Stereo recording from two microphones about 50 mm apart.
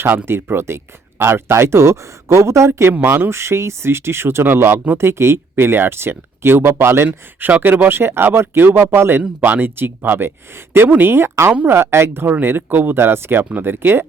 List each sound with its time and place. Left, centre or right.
0.3 s speech: right
3.0 s speech: right
7.1 s speech: right
7.9 s speech: right
9.4 s speech: right
12.3 s speech: right
13.4 s speech: right